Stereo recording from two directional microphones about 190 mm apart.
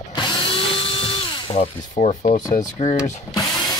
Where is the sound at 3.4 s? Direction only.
Centre (ahead or behind).